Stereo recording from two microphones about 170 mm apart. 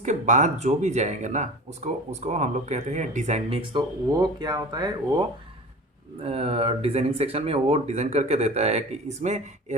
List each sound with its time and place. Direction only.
0.0 s speech: 45° right (ahead or behind); by 5.2 s 25° right (ahead or behind)
6.2 s speech: 35° right (ahead or behind)